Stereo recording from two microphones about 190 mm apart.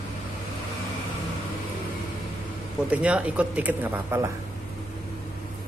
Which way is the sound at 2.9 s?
5° right (ahead or behind).